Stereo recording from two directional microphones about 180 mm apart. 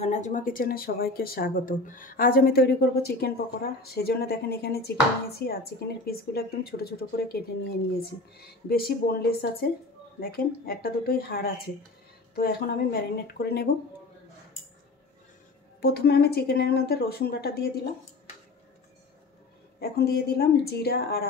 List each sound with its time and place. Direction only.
0.0 s speech: 40° left (ahead or behind); by 13.7 s 65° left (ahead or behind)
15.8 s speech: 65° left (ahead or behind)
19.8 s speech: 60° left (ahead or behind)